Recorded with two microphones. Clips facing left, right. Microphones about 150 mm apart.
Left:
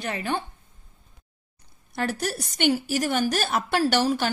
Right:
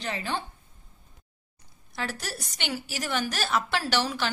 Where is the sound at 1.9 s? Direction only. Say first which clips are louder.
Left 7 dB; 55° left (ahead or behind).